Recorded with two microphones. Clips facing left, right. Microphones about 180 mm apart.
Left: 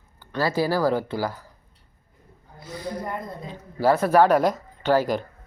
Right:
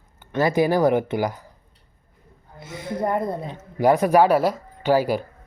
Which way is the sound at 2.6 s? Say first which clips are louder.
Right 1 dB; 25° right (ahead or behind).